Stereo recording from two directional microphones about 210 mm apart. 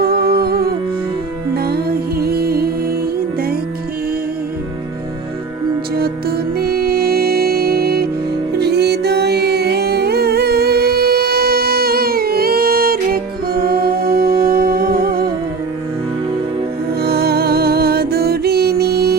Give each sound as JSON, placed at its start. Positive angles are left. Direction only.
{"t": 0.0, "sound": "music", "side_deg": -45}
{"t": 5.9, "sound": "music", "side_deg": -45}
{"t": 17.0, "sound": "music", "side_deg": -50}